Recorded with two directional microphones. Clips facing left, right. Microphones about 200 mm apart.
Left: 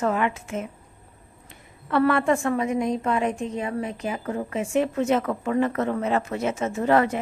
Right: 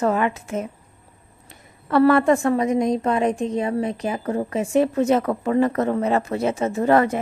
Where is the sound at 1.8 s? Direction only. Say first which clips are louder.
Right 5 dB; 40° right (ahead or behind).